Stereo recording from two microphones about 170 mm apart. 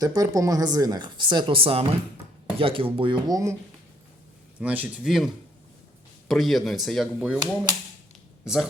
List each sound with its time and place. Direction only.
0.0 s a woman's voice: 20° right (ahead or behind)
4.6 s speech: 10° right (ahead or behind)